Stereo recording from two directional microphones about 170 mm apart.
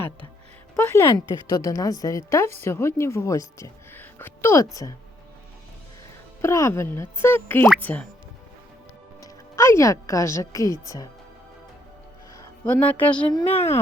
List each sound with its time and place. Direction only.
0.8 s a woman's voice: 15° left (ahead or behind)
6.4 s a woman's voice: 15° left (ahead or behind)
9.2 s speech: 15° left (ahead or behind)
12.6 s a woman's voice: 10° left (ahead or behind)